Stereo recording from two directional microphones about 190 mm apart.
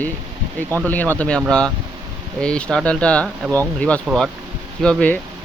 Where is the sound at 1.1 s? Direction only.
5° left (ahead or behind).